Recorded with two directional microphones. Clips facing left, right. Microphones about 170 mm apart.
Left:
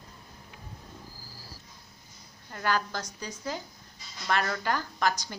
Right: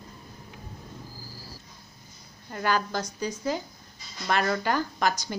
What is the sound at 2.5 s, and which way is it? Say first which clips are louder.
A woman's voice: right 3 dB; 15° right (ahead or behind).